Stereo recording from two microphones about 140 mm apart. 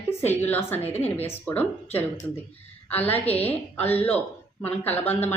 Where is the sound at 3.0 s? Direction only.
50° left (ahead or behind).